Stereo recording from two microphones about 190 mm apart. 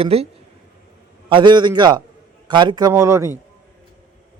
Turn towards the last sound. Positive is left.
turn(degrees=-15)  # may be behind; listen again after turning